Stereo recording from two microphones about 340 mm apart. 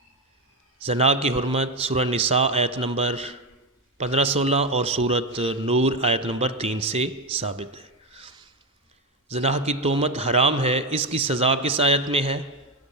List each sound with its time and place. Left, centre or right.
0.9 s a man's voice: centre